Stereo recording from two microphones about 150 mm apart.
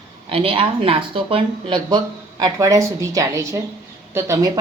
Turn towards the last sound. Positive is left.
turn(degrees=-20)  # may be behind; listen again after turning